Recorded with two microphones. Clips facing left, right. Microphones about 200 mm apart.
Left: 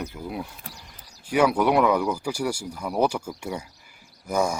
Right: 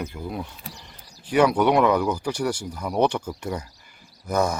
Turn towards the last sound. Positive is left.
turn(degrees=10)  # may be behind; listen again after turning